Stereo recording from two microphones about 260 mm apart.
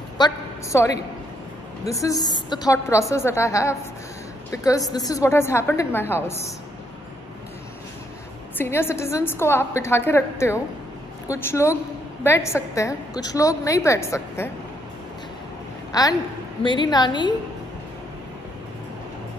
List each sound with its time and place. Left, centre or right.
0.2 s a woman's voice: centre
1.9 s a woman's voice: centre
8.5 s a woman's voice: centre
15.9 s a woman's voice: centre